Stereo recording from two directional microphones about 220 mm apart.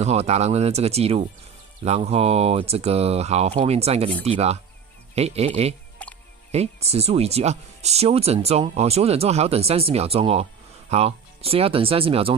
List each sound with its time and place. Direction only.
0.0 s speech: 30° right (ahead or behind)
6.0 s music: 5° left (ahead or behind)
6.5 s speech: 30° right (ahead or behind)